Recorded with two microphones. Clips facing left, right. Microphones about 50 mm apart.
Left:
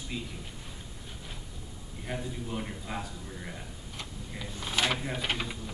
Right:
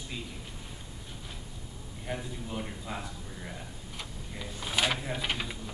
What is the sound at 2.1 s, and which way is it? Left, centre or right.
Speech, centre.